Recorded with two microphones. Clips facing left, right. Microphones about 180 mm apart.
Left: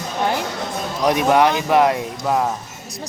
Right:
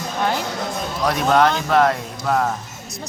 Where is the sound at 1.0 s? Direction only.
15° left (ahead or behind).